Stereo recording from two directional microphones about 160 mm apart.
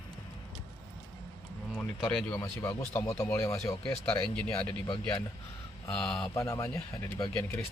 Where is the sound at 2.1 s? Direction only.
5° left (ahead or behind).